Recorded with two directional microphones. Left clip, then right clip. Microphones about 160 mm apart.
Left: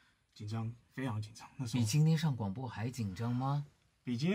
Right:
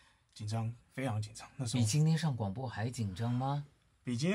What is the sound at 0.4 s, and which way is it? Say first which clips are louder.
Speech: right 3 dB; 15° right (ahead or behind).